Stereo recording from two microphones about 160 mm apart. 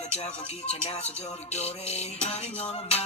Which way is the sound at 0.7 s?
40° left (ahead or behind).